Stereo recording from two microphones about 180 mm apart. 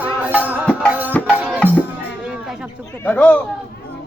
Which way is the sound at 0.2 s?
10° right (ahead or behind).